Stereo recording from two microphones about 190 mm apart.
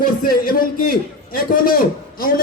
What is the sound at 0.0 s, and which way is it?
A man's voice, 50° left (ahead or behind).